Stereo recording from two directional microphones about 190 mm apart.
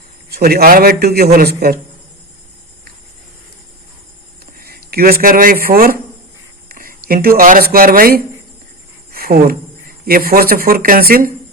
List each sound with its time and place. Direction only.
0.3 s a man's voice: 55° right (ahead or behind)
4.5 s a man's voice: 50° right (ahead or behind)